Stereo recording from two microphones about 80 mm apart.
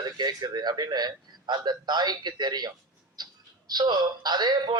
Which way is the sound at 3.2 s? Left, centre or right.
Right.